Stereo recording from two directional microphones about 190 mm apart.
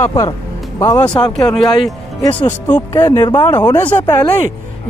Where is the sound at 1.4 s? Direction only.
5° left (ahead or behind).